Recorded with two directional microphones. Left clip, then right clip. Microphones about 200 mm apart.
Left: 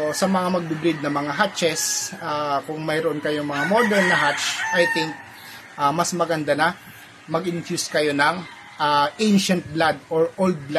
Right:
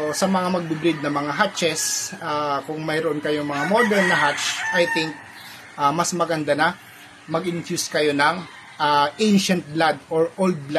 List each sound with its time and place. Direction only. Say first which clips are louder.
0.1 s speech: even; centre (ahead or behind)